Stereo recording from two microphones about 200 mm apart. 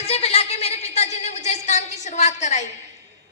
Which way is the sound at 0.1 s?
30° left (ahead or behind).